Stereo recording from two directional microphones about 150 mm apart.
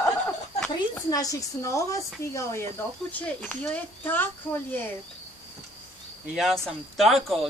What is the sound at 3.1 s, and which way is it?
Speech, 10° left (ahead or behind).